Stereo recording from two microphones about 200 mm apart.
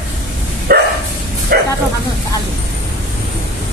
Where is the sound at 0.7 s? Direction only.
50° right (ahead or behind).